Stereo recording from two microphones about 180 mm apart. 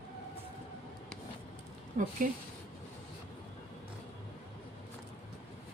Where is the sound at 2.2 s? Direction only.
45° right (ahead or behind).